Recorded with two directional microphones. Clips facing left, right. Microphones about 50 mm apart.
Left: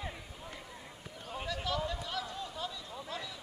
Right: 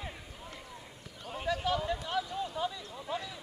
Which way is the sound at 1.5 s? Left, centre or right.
Centre.